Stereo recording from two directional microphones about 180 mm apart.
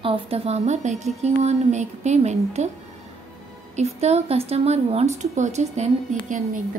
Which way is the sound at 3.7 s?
35° right (ahead or behind).